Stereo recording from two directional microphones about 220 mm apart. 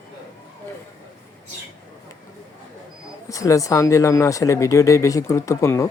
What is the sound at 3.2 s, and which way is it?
Speech, 15° left (ahead or behind).